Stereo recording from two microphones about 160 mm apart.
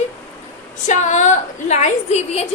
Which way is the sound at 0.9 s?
50° left (ahead or behind).